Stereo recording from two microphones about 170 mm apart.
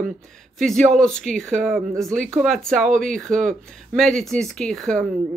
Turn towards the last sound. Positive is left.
turn(degrees=0)  # may be behind; listen again after turning